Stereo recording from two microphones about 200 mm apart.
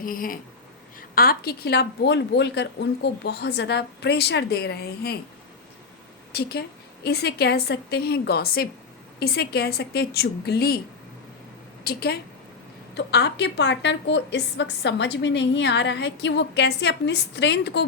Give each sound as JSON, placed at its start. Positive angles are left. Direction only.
{"t": 0.0, "sound": "a woman's voice", "side_deg": 45}
{"t": 6.3, "sound": "a woman's voice", "side_deg": 55}
{"t": 11.8, "sound": "a woman's voice", "side_deg": 50}